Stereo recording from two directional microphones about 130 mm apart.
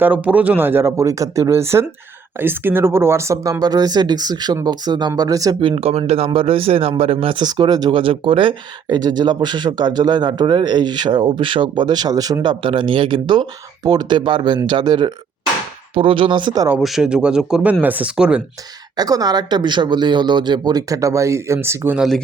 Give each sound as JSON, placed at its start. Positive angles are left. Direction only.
{"t": 0.0, "sound": "speech", "side_deg": -10}
{"t": 5.5, "sound": "speech", "side_deg": -45}
{"t": 16.8, "sound": "speech", "side_deg": -5}
{"t": 18.9, "sound": "speech", "side_deg": -30}
{"t": 21.9, "sound": "speech", "side_deg": 0}